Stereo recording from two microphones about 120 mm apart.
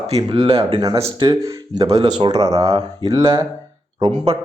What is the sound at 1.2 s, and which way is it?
Speech, 35° right (ahead or behind).